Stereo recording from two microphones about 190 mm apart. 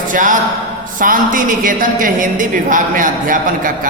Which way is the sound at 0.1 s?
45° right (ahead or behind).